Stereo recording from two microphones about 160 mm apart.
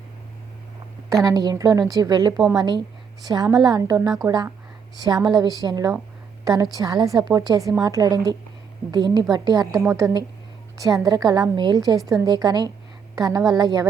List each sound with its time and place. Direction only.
1.1 s a woman's voice: 20° right (ahead or behind)